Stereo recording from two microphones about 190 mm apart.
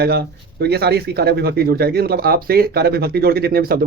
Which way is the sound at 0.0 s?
55° right (ahead or behind).